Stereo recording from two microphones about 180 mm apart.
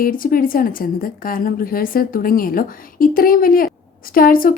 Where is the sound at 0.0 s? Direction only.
50° left (ahead or behind).